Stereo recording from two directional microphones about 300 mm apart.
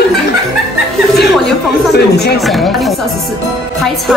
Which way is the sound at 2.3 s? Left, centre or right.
Centre.